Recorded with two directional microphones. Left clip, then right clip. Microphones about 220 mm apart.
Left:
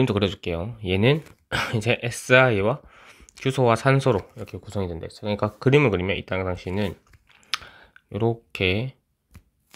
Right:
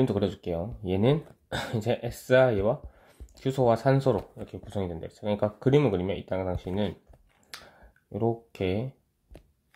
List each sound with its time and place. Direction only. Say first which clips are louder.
0.1 s speech: left 4 dB; 30° left (ahead or behind)
7.5 s clicking: left 15 dB; 35° left (ahead or behind)